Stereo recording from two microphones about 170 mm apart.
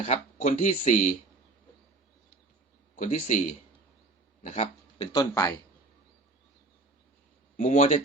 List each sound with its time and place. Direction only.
0.0 s speech: 40° left (ahead or behind)
2.9 s a man's voice: 45° left (ahead or behind)
5.1 s speech: 20° left (ahead or behind)
7.5 s speech: 45° left (ahead or behind)